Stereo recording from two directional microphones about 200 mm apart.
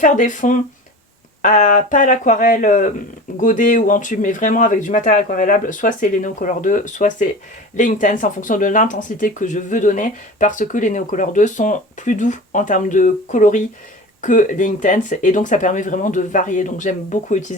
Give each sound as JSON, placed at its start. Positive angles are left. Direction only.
{"t": 0.0, "sound": "speech", "side_deg": 40}